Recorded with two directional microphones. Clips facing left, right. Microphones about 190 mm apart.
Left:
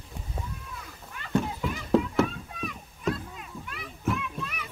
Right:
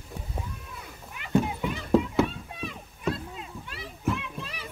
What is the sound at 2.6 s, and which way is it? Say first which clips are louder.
Rowboat: even; 30° right (ahead or behind).